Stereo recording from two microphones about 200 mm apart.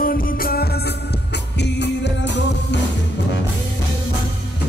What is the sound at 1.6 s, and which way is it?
Music, 60° left (ahead or behind).